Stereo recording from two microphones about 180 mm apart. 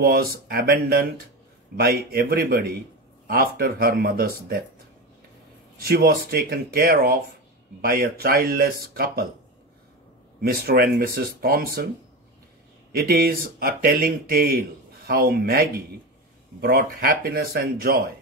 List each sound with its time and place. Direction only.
0.0 s speech: 55° right (ahead or behind)
5.8 s speech: 55° right (ahead or behind)
10.4 s speech: 55° right (ahead or behind)
12.9 s speech: 55° right (ahead or behind)